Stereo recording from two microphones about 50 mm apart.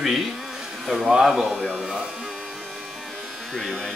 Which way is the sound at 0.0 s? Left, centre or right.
Centre.